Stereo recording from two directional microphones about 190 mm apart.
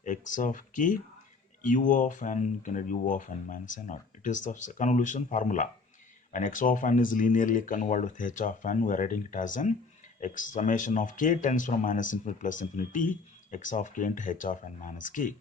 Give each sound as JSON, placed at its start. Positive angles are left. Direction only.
{"t": 0.0, "sound": "speech", "side_deg": 40}